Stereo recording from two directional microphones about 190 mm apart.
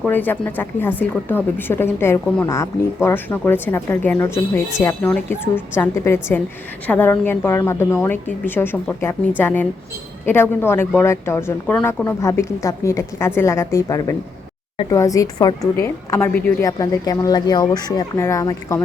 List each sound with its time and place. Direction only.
0.0 s speech: 10° left (ahead or behind)